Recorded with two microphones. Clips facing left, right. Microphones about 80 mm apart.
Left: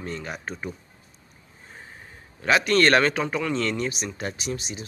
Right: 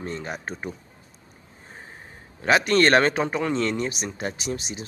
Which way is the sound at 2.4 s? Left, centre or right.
Right.